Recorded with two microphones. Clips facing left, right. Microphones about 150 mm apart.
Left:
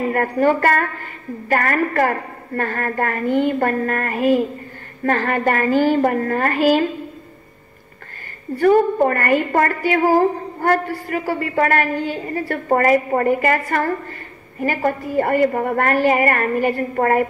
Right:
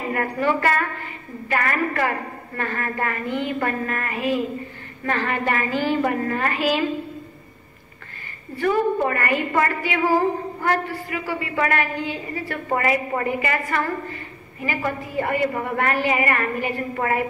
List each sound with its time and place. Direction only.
0.1 s a woman's voice: 45° left (ahead or behind)
8.5 s a woman's voice: 45° left (ahead or behind)